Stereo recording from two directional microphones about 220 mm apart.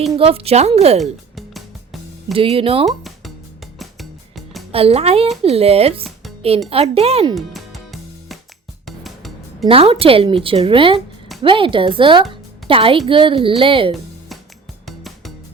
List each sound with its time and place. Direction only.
0.2 s a woman's voice: 25° right (ahead or behind)
1.4 s music: centre (ahead or behind)
2.3 s a woman's voice: 25° right (ahead or behind)
2.8 s music: centre (ahead or behind)
4.7 s a woman's voice: 25° right (ahead or behind)
7.3 s music: centre (ahead or behind)
9.6 s a woman's voice: 25° right (ahead or behind)
12.3 s music: 25° right (ahead or behind)
13.1 s a woman's voice: 25° right (ahead or behind)
14.8 s music: centre (ahead or behind)